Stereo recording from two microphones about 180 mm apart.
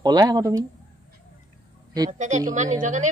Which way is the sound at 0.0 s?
20° right (ahead or behind).